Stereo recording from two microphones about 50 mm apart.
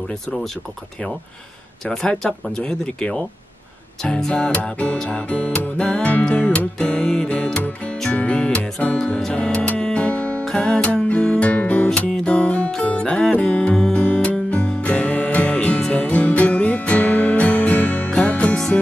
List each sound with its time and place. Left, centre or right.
0.1 s speech: centre
1.9 s speech: centre
4.3 s music: left
8.4 s music: centre
10.6 s speech: centre
11.1 s music: left